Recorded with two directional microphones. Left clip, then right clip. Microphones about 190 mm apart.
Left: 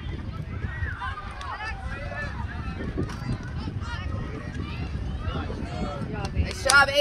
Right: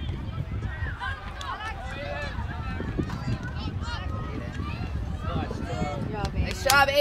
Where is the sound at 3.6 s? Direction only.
90° right.